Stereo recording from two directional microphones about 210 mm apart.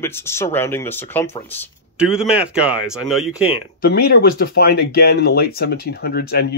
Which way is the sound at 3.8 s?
45° left (ahead or behind).